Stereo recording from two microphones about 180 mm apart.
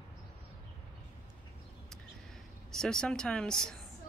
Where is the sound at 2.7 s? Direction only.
5° left (ahead or behind).